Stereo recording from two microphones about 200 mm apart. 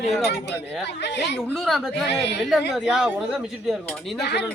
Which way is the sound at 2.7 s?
Centre (ahead or behind).